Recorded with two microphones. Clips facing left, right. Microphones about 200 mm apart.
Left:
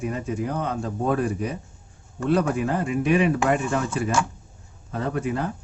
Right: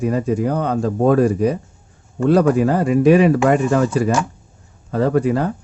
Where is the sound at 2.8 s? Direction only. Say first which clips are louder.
Right 9 dB; 40° right (ahead or behind).